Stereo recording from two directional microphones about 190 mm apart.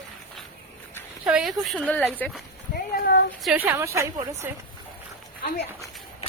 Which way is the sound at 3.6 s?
15° right (ahead or behind).